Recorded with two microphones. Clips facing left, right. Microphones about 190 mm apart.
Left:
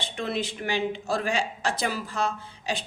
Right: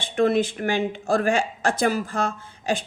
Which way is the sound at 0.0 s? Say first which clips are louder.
Right 10 dB; 50° right (ahead or behind).